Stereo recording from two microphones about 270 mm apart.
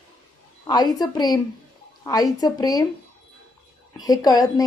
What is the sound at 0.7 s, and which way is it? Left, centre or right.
A woman's voice, centre.